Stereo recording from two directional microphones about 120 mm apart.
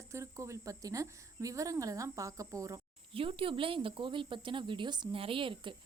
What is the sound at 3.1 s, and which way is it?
Speech, 50° right (ahead or behind).